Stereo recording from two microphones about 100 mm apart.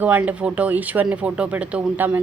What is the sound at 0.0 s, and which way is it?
A woman's voice, 15° right (ahead or behind).